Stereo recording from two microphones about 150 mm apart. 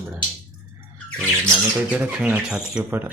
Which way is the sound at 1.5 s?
10° right (ahead or behind).